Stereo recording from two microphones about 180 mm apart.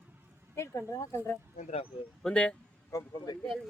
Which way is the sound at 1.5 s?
35° left (ahead or behind).